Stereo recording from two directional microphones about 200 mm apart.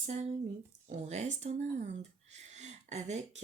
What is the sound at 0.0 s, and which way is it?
Speech, 35° right (ahead or behind).